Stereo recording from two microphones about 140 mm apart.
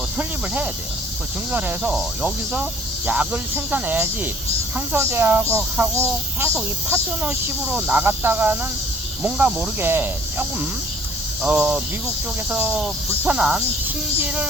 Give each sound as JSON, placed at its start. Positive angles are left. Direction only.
{"t": 0.2, "sound": "snake", "side_deg": -10}